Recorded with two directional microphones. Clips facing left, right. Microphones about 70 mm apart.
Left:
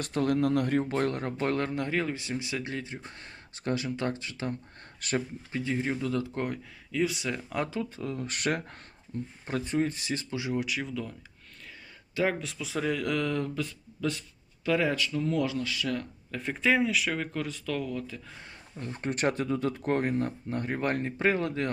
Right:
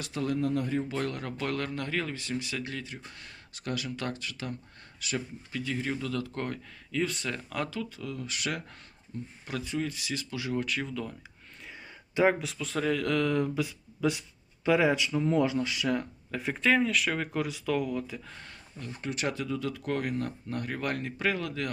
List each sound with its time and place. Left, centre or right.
0.0 s speech: left
0.3 s speech: left
0.9 s speech: left
4.9 s speech: left
5.5 s speech: left
10.6 s speech: centre
12.1 s speech: centre
12.4 s speech: centre
16.3 s speech: centre
18.8 s speech: left